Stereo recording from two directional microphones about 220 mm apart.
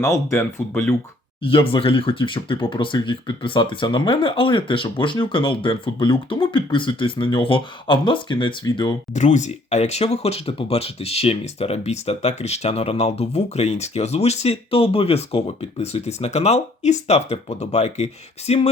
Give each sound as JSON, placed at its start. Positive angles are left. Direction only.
{"t": 0.0, "sound": "speech", "side_deg": 10}
{"t": 1.5, "sound": "speech", "side_deg": 25}